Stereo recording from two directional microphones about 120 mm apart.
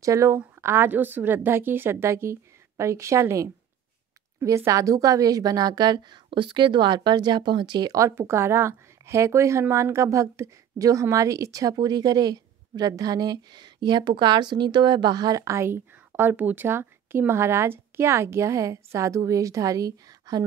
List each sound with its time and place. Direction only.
0.0 s a woman's voice: 25° right (ahead or behind)